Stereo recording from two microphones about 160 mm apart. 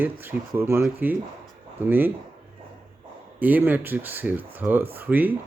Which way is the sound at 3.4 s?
10° right (ahead or behind).